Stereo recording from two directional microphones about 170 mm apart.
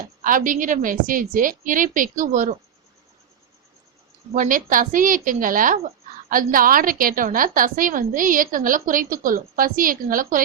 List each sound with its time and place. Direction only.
0.2 s a woman's voice: 50° right (ahead or behind)
4.4 s a woman's voice: 50° right (ahead or behind)